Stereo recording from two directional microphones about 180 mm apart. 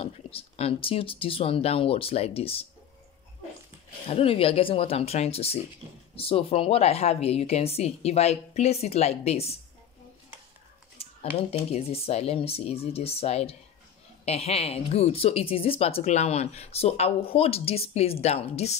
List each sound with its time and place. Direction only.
0.0 s speech: 30° left (ahead or behind)
4.1 s speech: 30° left (ahead or behind)
11.0 s speech: 35° left (ahead or behind)